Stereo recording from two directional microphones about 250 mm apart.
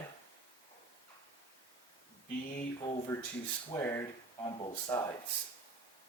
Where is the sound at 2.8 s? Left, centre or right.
Centre.